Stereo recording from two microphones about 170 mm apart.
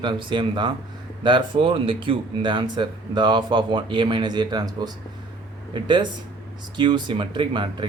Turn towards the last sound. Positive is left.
turn(degrees=-30)  # may be behind; listen again after turning